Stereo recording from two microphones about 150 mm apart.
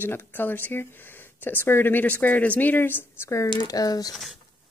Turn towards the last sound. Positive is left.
turn(degrees=25)  # may be behind; listen again after turning